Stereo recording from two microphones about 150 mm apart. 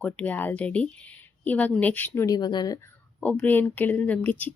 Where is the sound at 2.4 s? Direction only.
30° left (ahead or behind).